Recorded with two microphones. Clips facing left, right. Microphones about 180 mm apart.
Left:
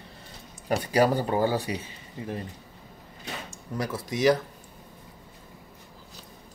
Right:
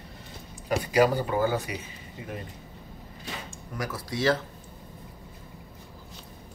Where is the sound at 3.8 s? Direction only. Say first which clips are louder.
Left 3 dB; 25° left (ahead or behind).